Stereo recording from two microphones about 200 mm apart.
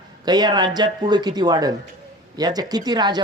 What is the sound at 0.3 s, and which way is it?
Speech, 20° right (ahead or behind).